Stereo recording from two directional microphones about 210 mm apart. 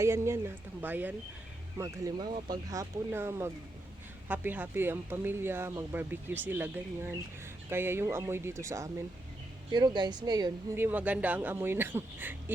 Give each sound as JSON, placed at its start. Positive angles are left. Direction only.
{"t": 0.0, "sound": "speech", "side_deg": -15}